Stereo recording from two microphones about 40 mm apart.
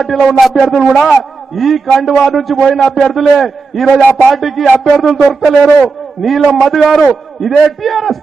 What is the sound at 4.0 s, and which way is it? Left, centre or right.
Speech, left.